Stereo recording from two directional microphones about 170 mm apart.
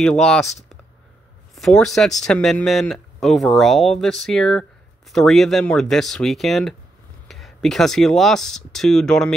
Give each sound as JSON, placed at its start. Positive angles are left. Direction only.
{"t": 0.0, "sound": "speech", "side_deg": 5}